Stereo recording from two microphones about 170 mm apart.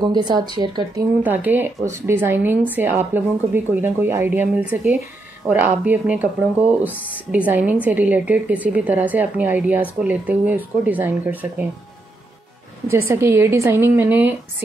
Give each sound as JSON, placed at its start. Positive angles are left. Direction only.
{"t": 0.0, "sound": "speech", "side_deg": -25}
{"t": 1.2, "sound": "speech", "side_deg": -10}
{"t": 7.2, "sound": "speech", "side_deg": -10}
{"t": 13.1, "sound": "speech", "side_deg": -15}